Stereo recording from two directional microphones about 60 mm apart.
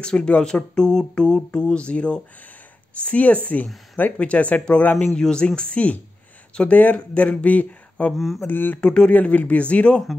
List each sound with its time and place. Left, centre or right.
0.0 s speech: centre; by 8.7 s left
8.8 s speech: centre